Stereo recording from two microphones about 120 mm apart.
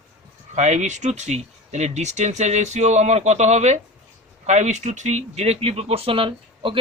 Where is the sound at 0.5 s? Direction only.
70° right (ahead or behind).